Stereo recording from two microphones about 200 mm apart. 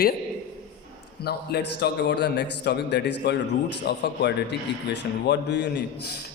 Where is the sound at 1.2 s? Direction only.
55° left (ahead or behind).